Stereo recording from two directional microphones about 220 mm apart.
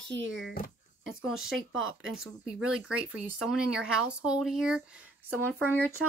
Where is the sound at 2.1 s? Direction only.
Centre (ahead or behind).